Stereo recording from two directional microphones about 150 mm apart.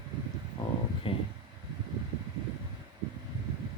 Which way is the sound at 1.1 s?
35° left (ahead or behind).